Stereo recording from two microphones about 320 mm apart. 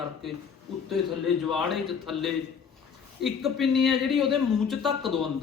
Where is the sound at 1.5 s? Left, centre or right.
Centre.